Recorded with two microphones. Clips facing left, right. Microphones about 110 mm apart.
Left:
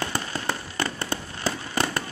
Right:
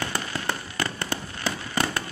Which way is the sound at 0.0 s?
30° left (ahead or behind).